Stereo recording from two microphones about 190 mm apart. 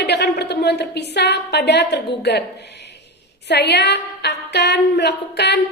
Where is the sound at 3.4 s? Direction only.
60° left (ahead or behind).